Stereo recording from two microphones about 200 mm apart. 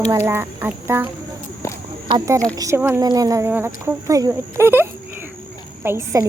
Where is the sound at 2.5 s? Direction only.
15° right (ahead or behind).